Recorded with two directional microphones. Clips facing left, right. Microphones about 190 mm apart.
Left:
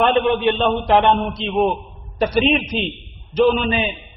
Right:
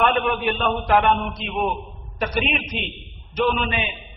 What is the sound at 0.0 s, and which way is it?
A man's voice, 30° left (ahead or behind).